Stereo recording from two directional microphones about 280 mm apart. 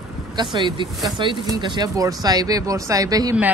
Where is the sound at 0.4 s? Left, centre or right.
Centre.